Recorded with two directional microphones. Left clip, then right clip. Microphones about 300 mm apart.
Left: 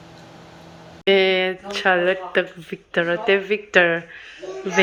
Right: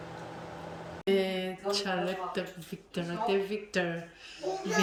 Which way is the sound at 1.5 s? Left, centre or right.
Left.